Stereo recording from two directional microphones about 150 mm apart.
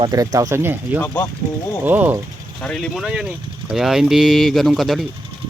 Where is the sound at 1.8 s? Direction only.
15° right (ahead or behind).